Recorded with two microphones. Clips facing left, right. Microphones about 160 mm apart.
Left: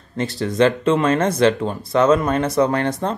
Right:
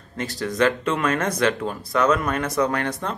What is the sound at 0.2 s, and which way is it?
Speech, 25° left (ahead or behind).